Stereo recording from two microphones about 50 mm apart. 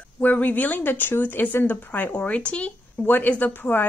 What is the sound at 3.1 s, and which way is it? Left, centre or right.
Speech, left.